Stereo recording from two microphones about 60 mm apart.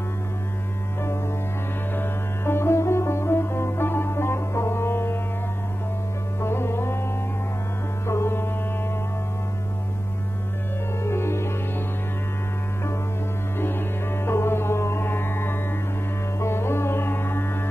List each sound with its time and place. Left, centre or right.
2.0 s sitar: left
6.4 s music: left
8.1 s music: left
11.1 s music: left
13.6 s music: left